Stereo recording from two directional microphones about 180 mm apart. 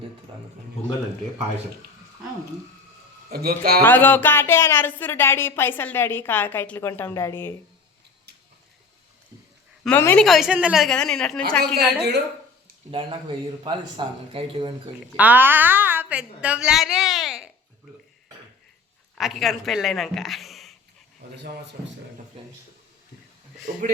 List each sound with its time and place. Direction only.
0.3 s speech: 25° right (ahead or behind)
3.2 s a man's voice: 55° right (ahead or behind)
3.8 s speech: 10° left (ahead or behind)
9.8 s speech: 10° left (ahead or behind)
10.2 s a woman's voice: centre (ahead or behind)
11.8 s a man's voice: 65° right (ahead or behind)
12.9 s speech: 30° right (ahead or behind)
15.1 s a woman's voice: 10° right (ahead or behind)
19.1 s speech: centre (ahead or behind)
23.7 s speech: 45° right (ahead or behind)